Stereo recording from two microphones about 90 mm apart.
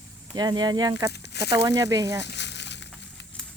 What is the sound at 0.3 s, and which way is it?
Speech, 50° right (ahead or behind).